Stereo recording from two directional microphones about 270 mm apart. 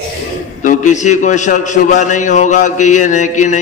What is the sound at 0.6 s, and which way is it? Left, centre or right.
A man's voice, left.